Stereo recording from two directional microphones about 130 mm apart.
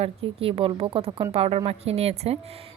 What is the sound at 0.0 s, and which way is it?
A woman's voice, 50° right (ahead or behind).